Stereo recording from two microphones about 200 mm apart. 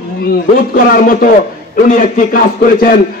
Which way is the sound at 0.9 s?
45° left (ahead or behind).